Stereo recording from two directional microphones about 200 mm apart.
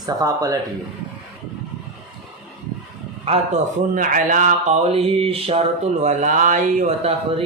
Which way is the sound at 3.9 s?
40° right (ahead or behind).